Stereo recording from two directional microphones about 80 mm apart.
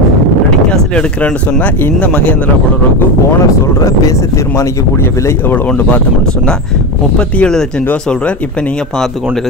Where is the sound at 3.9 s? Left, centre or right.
Left.